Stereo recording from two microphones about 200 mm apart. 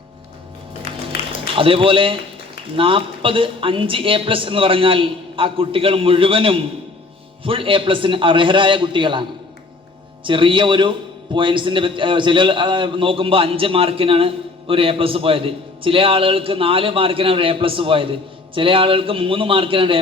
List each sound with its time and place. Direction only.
1.5 s a man's voice: 25° right (ahead or behind)
10.2 s a man's voice: 25° right (ahead or behind)